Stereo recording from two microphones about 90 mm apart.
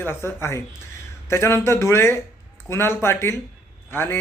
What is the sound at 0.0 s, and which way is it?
Speech, 25° left (ahead or behind).